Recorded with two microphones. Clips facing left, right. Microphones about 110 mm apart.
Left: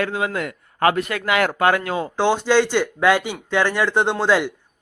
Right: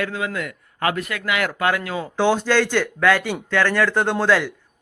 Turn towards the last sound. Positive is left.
turn(degrees=20)  # may be behind; listen again after turning